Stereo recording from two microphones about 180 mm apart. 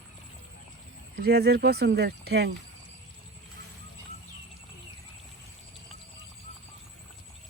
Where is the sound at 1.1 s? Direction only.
60° right (ahead or behind).